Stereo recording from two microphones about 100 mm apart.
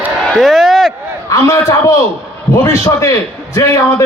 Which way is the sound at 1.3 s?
30° left (ahead or behind).